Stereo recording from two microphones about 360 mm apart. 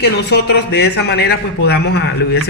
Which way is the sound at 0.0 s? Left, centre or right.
Left.